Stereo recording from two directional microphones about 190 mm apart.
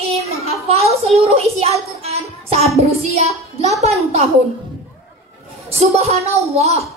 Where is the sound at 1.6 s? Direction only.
35° right (ahead or behind).